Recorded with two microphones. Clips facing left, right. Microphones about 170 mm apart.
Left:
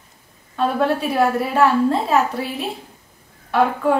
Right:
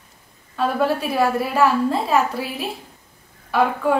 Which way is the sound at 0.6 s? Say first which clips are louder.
Left 1 dB; centre (ahead or behind).